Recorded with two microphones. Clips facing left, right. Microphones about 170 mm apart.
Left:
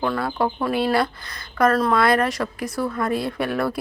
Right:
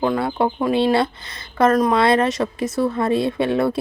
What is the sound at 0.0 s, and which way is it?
Speech, 20° right (ahead or behind).